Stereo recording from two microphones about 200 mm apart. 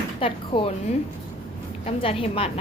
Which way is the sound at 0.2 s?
30° left (ahead or behind).